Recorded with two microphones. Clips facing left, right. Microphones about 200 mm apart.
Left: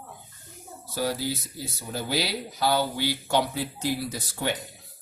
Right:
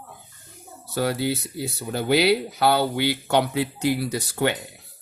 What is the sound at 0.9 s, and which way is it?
Speech, 65° right (ahead or behind).